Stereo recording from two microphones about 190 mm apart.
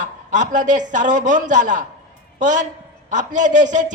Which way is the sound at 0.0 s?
40° right (ahead or behind).